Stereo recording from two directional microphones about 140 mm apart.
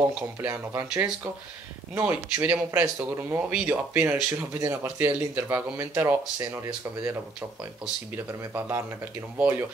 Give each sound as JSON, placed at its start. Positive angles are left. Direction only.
{"t": 0.4, "sound": "speech", "side_deg": -15}
{"t": 8.3, "sound": "speech", "side_deg": -15}